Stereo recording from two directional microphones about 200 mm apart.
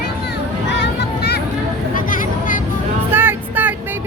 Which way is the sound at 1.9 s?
45° left (ahead or behind).